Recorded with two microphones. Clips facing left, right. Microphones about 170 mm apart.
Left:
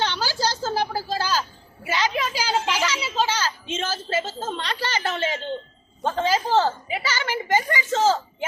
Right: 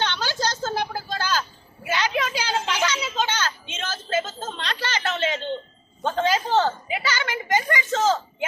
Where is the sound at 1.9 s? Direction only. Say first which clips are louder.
Even; centre (ahead or behind).